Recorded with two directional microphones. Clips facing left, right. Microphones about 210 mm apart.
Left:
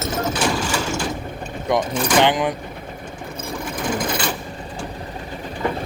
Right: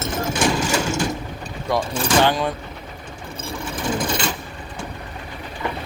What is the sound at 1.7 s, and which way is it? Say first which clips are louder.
Speech: left 1 dB; 20° left (ahead or behind).